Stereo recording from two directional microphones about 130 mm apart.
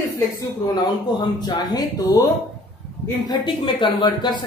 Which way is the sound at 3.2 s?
35° left (ahead or behind).